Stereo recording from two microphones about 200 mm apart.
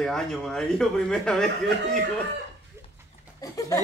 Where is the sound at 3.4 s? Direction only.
15° left (ahead or behind).